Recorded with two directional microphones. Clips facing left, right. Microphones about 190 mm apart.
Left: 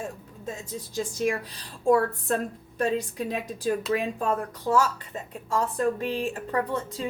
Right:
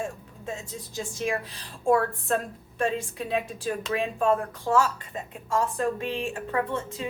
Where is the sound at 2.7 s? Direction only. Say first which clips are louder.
Left 1 dB; 40° left (ahead or behind).